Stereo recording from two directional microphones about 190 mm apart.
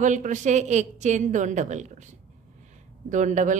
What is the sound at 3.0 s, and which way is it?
Speech, 40° right (ahead or behind).